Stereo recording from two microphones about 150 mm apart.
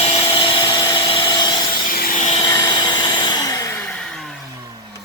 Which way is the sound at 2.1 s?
50° left (ahead or behind).